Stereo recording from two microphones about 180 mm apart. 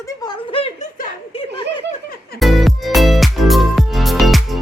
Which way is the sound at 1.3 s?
25° left (ahead or behind).